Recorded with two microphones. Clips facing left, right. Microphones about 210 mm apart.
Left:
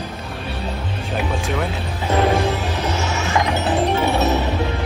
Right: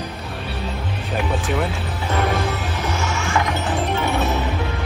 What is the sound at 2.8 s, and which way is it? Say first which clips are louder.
Music: left 2 dB; 25° left (ahead or behind).